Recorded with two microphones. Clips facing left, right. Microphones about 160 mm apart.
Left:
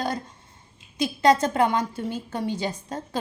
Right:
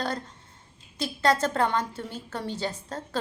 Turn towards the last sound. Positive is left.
turn(degrees=15)  # may be behind; listen again after turning